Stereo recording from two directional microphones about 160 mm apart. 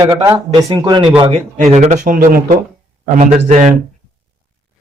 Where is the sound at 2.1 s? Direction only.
65° right (ahead or behind).